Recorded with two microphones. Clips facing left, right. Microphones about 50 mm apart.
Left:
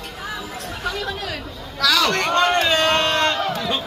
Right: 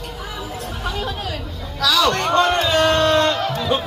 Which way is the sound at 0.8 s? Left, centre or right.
Left.